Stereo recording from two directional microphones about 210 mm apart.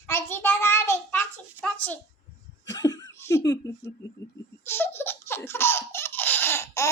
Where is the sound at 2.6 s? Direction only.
15° left (ahead or behind).